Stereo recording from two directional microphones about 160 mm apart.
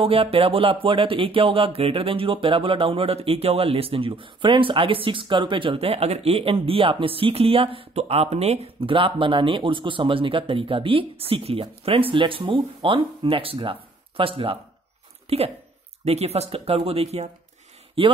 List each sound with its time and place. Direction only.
0.0 s speech: 35° right (ahead or behind)